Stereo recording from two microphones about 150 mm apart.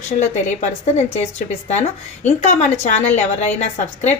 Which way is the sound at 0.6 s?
45° left (ahead or behind).